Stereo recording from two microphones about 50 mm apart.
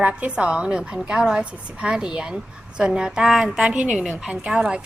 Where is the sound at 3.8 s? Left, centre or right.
Right.